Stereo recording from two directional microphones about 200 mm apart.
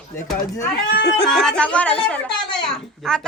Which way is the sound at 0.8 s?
55° left (ahead or behind).